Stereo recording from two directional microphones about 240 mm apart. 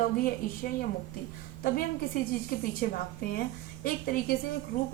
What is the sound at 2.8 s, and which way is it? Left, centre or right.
A woman's voice, left.